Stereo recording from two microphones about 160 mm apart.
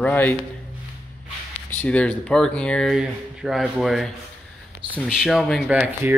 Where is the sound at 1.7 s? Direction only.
10° left (ahead or behind).